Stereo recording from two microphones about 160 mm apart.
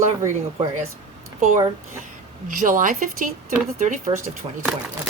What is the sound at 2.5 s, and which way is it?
Speech, 55° right (ahead or behind).